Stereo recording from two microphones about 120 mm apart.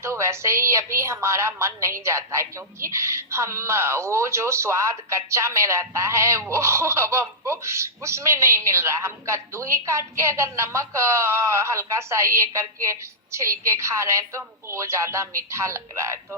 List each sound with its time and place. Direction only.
0.0 s speech: 25° right (ahead or behind)